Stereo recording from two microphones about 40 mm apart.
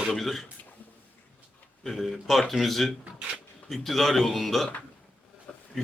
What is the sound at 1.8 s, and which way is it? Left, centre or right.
A man's voice, centre.